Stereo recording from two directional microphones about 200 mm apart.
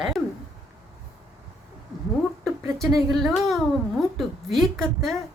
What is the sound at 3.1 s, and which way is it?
A woman's voice, centre (ahead or behind).